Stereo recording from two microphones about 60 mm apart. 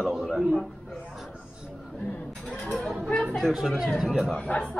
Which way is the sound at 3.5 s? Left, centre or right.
Centre.